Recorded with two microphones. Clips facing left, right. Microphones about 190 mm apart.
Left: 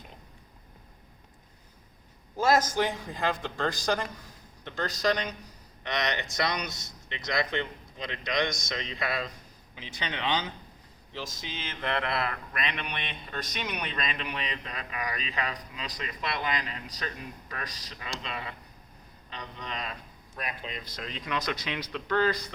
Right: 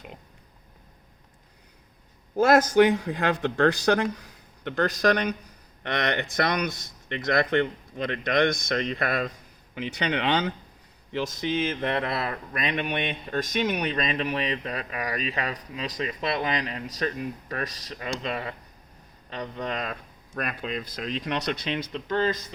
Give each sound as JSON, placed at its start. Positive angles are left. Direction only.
{"t": 2.3, "sound": "speech", "side_deg": -60}
{"t": 20.3, "sound": "speech", "side_deg": -70}
{"t": 21.6, "sound": "speech", "side_deg": -25}